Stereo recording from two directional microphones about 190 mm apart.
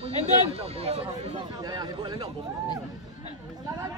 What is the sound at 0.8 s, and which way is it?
Speech, 30° right (ahead or behind).